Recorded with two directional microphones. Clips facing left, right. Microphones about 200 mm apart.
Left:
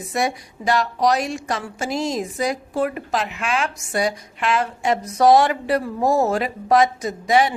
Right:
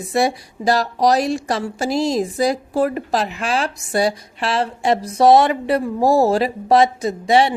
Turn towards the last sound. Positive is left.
turn(degrees=-30)  # may be behind; listen again after turning